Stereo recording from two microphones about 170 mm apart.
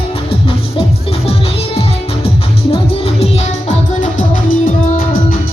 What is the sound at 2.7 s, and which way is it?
Music, 35° left (ahead or behind).